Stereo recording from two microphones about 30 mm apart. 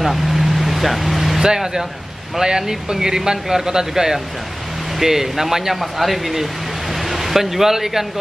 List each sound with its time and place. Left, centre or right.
0.0 s vehicle: centre
1.4 s speech: centre